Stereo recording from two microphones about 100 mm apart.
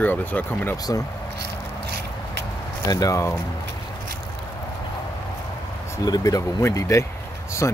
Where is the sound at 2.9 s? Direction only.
35° left (ahead or behind).